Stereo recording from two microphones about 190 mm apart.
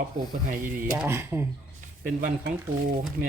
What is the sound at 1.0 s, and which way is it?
Speech, 15° right (ahead or behind).